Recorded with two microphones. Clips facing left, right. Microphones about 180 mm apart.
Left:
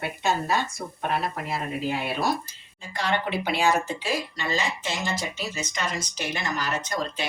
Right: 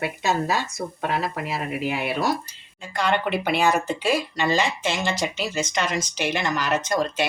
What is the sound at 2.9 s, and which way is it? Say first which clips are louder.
Speech: right 4 dB; 60° right (ahead or behind).